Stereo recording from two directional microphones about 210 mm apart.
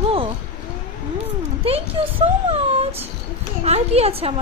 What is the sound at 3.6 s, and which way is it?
Speech, 30° right (ahead or behind).